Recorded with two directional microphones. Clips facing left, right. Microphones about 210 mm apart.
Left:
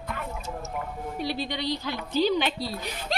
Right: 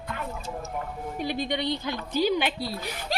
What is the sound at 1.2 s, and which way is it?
A woman's voice, 15° right (ahead or behind).